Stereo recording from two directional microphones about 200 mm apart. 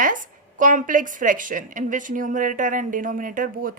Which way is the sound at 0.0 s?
40° right (ahead or behind).